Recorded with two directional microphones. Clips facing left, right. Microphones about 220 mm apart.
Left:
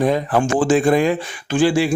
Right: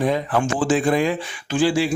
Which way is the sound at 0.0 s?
40° left (ahead or behind).